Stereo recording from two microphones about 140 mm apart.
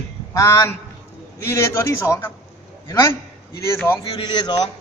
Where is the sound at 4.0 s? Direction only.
35° left (ahead or behind).